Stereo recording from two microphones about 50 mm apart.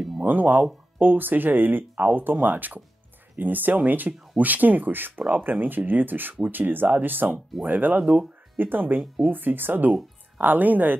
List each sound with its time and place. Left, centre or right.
0.2 s speech: right